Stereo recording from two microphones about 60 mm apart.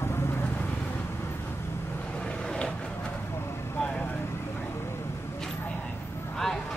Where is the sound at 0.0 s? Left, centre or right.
Left.